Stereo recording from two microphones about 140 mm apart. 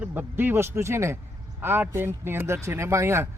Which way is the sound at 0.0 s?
15° right (ahead or behind).